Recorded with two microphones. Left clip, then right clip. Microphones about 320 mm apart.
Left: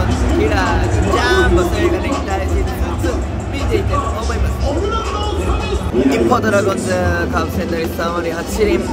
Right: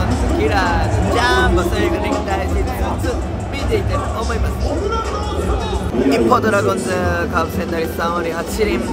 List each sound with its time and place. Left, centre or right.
0.4 s speech: centre
1.1 s music: centre
6.0 s a man's voice: centre